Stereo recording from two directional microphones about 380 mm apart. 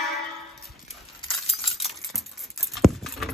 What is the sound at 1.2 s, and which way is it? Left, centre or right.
Keys jangling, centre.